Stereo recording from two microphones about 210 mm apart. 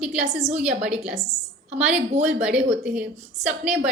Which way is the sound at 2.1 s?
30° right (ahead or behind).